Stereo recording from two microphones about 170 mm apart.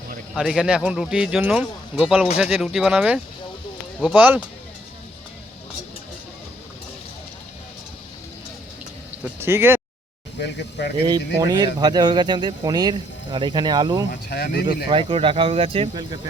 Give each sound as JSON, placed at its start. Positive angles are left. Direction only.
{"t": 0.3, "sound": "speech", "side_deg": -5}
{"t": 9.4, "sound": "speech", "side_deg": -15}
{"t": 10.4, "sound": "speech", "side_deg": 75}
{"t": 11.3, "sound": "speech", "side_deg": -25}
{"t": 14.1, "sound": "speech", "side_deg": 60}
{"t": 14.8, "sound": "speech", "side_deg": -30}